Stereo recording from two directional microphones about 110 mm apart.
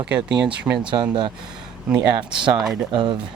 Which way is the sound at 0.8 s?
45° right (ahead or behind).